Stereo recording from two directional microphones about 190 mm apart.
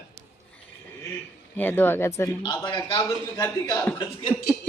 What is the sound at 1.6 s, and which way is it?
A man's voice, 10° left (ahead or behind).